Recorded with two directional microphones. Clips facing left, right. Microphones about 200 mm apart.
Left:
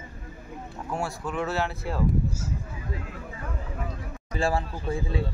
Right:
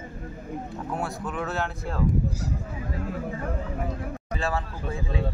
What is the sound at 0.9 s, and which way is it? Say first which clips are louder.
Speech: left 1 dB; centre (ahead or behind).